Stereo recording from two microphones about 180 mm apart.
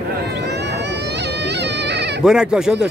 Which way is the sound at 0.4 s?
70° right (ahead or behind).